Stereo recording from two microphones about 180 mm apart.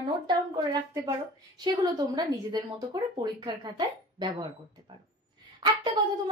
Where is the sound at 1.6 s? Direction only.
25° right (ahead or behind).